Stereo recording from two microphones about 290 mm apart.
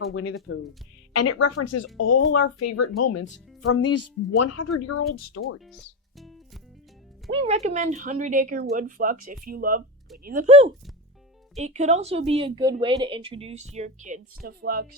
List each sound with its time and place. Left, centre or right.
0.1 s speech: left
1.1 s speech: left
4.4 s speech: left
5.5 s music: centre
7.3 s a woman's voice: right